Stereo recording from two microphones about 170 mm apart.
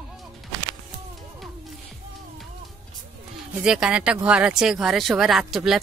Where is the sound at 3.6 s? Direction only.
5° right (ahead or behind).